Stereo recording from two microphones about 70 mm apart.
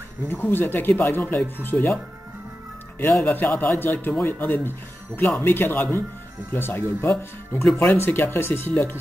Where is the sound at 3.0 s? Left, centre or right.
Left.